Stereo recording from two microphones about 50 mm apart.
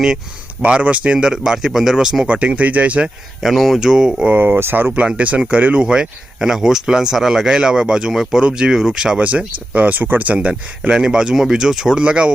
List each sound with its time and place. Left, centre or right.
0.7 s speech: right; by 2.2 s centre
2.2 s speech: right
3.4 s speech: centre
4.3 s speech: right
4.9 s speech: right
5.9 s speech: centre
9.2 s speech: right
10.5 s speech: centre